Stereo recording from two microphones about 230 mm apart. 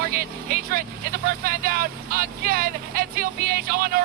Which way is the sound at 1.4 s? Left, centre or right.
Right.